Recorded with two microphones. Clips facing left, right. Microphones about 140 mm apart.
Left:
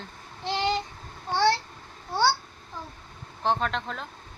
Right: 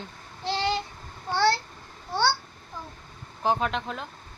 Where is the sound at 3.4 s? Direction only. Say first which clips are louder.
Right 1 dB; 5° right (ahead or behind).